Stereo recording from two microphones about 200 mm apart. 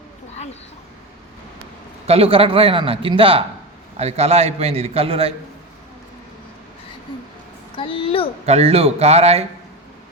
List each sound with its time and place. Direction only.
2.0 s a man's voice: 30° right (ahead or behind)
7.8 s a child's voice: 25° left (ahead or behind)
8.4 s a man's voice: 30° right (ahead or behind)